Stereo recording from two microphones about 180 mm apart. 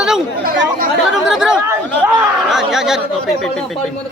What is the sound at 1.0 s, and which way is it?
Speech, 5° right (ahead or behind).